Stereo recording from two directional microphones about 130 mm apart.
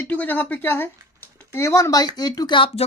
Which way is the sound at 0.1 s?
15° left (ahead or behind).